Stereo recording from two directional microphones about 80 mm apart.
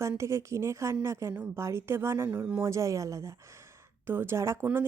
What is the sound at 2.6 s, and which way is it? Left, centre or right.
Speech, right.